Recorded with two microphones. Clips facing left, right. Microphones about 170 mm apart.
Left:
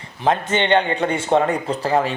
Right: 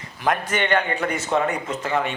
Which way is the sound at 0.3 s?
25° left (ahead or behind).